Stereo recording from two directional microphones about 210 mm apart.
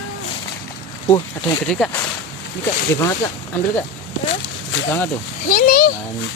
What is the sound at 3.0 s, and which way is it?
Speech, 15° left (ahead or behind).